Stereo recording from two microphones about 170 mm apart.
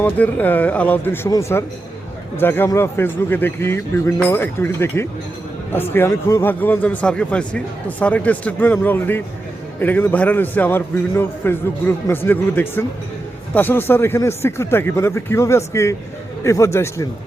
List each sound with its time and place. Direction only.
0.0 s speech: 10° left (ahead or behind)